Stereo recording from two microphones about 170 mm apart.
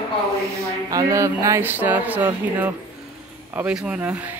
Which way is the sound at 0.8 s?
20° right (ahead or behind).